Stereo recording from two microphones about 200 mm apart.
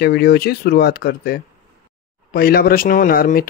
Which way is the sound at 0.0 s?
50° left (ahead or behind).